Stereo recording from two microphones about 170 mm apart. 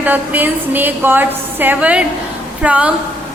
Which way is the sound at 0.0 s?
10° right (ahead or behind).